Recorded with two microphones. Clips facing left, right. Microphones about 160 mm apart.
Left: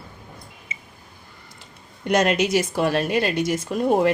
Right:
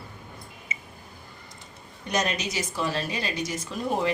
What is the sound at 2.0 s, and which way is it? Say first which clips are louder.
Speech: left 9 dB; 60° left (ahead or behind).